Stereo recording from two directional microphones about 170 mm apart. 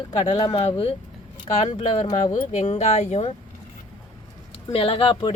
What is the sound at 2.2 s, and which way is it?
Speech, 40° left (ahead or behind).